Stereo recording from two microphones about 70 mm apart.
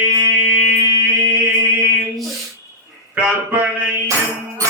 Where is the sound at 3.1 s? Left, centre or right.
Right.